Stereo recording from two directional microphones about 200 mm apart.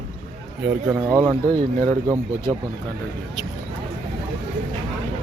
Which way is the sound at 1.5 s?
45° right (ahead or behind).